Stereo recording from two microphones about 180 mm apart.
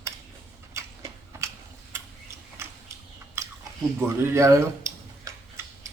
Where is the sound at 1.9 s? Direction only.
15° right (ahead or behind).